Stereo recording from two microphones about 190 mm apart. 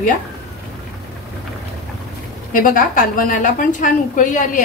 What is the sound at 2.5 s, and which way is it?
A woman's voice, 45° left (ahead or behind).